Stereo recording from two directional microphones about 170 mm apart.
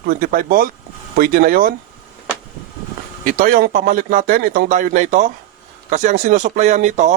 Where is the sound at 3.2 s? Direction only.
50° right (ahead or behind).